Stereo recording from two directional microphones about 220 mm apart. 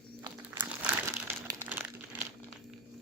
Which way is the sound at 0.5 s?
10° right (ahead or behind).